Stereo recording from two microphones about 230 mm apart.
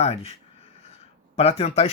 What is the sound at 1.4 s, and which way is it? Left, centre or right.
Speech, left.